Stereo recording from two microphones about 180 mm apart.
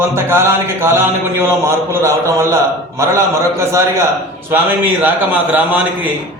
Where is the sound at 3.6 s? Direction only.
15° right (ahead or behind).